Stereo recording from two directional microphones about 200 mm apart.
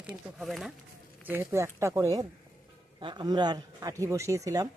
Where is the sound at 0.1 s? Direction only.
Centre (ahead or behind).